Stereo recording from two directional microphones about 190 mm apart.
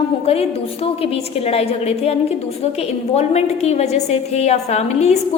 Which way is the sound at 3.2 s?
35° left (ahead or behind).